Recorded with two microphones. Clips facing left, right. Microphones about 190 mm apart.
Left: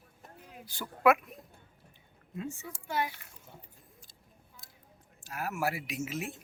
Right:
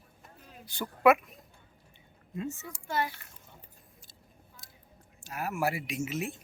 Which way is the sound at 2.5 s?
10° left (ahead or behind).